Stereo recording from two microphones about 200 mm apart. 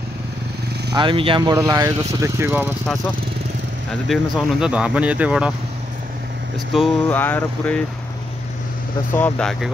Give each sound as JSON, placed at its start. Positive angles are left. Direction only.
{"t": 0.9, "sound": "speech", "side_deg": -25}
{"t": 4.1, "sound": "speech", "side_deg": 0}
{"t": 6.7, "sound": "speech", "side_deg": 0}
{"t": 7.2, "sound": "a sound", "side_deg": 10}
{"t": 9.1, "sound": "speech", "side_deg": 5}